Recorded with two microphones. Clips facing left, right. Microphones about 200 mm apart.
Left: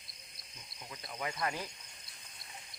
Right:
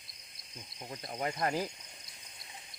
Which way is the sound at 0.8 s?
40° right (ahead or behind).